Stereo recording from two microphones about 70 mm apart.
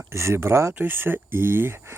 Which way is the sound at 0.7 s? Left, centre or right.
Right.